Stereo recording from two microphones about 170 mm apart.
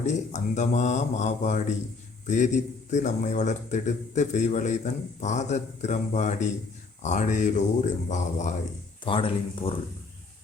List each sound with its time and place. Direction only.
0.0 s a man's voice: 45° left (ahead or behind)
9.0 s speech: 30° left (ahead or behind)